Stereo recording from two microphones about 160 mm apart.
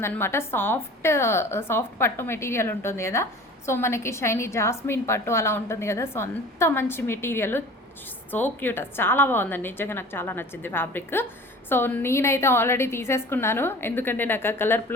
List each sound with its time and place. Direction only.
0.0 s a woman's voice: 15° left (ahead or behind)